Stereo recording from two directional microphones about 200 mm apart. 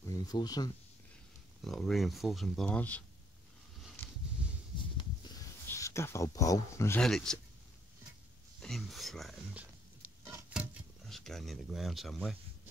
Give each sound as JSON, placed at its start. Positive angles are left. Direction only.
{"t": 0.0, "sound": "speech", "side_deg": 20}
{"t": 1.6, "sound": "speech", "side_deg": 0}
{"t": 4.9, "sound": "a sound", "side_deg": 20}
{"t": 7.0, "sound": "speech", "side_deg": 5}
{"t": 8.5, "sound": "speech", "side_deg": 0}
{"t": 10.3, "sound": "a sound", "side_deg": -5}